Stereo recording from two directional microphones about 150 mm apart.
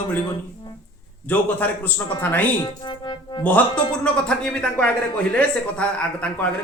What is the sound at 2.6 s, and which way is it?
Music, 30° left (ahead or behind).